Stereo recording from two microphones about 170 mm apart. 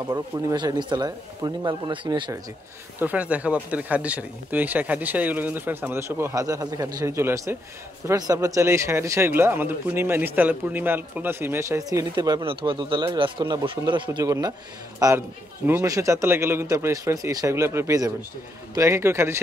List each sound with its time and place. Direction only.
0.0 s speech: 20° right (ahead or behind)
3.0 s speech: 10° right (ahead or behind)